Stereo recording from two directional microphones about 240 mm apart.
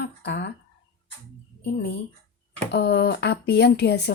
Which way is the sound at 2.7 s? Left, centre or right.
Left.